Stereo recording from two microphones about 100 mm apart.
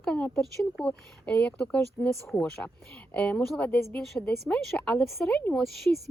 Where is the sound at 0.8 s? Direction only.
15° left (ahead or behind).